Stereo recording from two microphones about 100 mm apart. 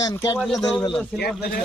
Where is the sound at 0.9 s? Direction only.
Centre (ahead or behind).